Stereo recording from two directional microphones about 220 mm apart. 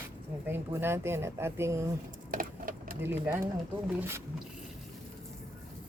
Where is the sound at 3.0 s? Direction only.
10° right (ahead or behind).